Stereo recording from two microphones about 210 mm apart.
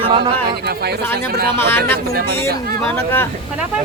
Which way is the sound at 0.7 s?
50° right (ahead or behind).